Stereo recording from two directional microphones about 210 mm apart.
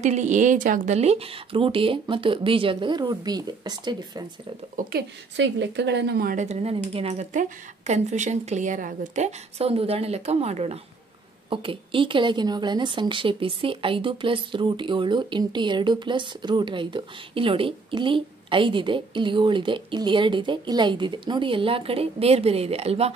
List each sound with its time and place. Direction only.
0.0 s a woman's voice: 35° right (ahead or behind)
4.7 s a woman's voice: 55° right (ahead or behind); by 23.1 s 30° right (ahead or behind)